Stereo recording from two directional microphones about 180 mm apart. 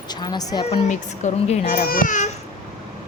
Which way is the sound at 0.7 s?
40° left (ahead or behind).